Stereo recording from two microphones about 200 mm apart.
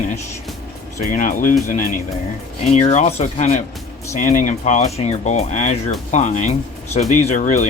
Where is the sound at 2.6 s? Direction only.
35° left (ahead or behind).